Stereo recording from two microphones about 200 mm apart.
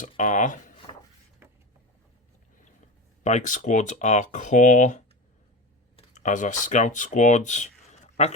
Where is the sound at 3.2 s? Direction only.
35° left (ahead or behind).